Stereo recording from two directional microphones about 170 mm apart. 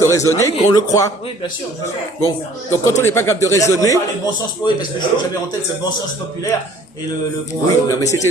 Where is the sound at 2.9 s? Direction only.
15° left (ahead or behind).